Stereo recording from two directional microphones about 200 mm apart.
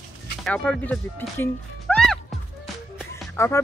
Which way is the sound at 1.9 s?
Centre (ahead or behind).